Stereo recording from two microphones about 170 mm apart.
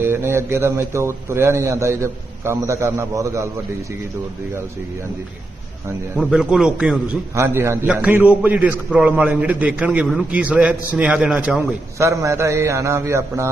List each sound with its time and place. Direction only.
0.0 s a man's voice: 15° right (ahead or behind)
6.1 s a man's voice: centre (ahead or behind)
7.3 s a man's voice: 15° right (ahead or behind)